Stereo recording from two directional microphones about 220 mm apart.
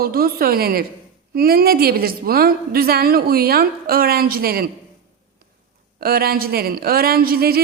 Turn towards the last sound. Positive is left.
turn(degrees=-45)  # may be behind; listen again after turning